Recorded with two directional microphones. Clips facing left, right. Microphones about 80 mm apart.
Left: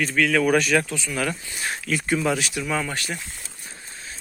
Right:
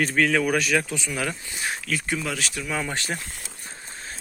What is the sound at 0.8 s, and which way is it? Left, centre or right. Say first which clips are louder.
Speech: even; right.